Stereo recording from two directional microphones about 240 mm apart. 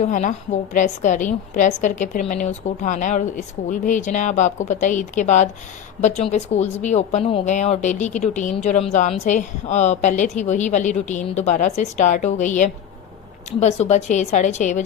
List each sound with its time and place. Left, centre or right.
0.0 s a woman's voice: left